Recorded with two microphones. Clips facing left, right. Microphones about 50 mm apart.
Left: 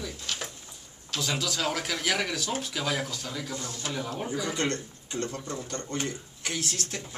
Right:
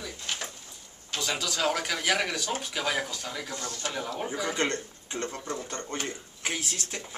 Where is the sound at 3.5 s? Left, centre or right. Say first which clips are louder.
Right 1 dB; centre.